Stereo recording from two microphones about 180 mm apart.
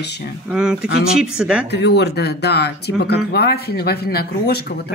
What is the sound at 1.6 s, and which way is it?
Speech, 70° left (ahead or behind).